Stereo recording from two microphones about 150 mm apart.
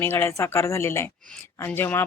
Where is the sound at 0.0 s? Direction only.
15° left (ahead or behind).